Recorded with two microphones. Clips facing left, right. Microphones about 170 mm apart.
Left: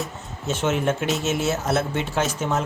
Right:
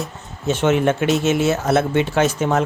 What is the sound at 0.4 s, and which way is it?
Speech, 65° right (ahead or behind).